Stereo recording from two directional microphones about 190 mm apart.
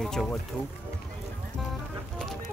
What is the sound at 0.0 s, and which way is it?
Speech, centre (ahead or behind).